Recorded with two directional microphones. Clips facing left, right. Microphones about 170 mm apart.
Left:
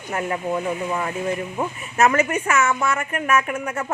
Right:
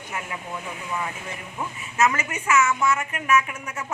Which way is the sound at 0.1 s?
55° left (ahead or behind).